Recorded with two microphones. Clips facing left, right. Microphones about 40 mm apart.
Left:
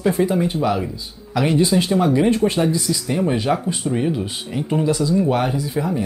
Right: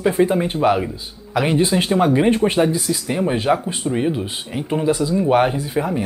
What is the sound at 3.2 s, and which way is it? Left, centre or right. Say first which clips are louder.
Speech: right 2 dB; centre.